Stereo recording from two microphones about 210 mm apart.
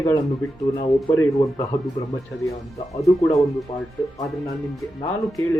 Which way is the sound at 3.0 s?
15° left (ahead or behind).